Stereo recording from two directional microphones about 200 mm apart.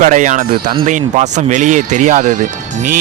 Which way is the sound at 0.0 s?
40° right (ahead or behind).